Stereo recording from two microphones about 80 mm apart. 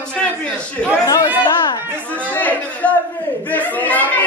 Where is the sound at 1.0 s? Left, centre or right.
Left.